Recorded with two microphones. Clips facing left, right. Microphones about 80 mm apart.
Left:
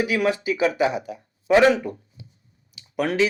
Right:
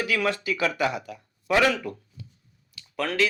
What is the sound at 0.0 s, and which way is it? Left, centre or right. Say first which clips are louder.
A man's voice: left 4 dB; centre.